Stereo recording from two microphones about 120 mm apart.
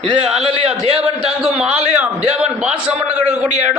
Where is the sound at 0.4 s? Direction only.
60° right (ahead or behind).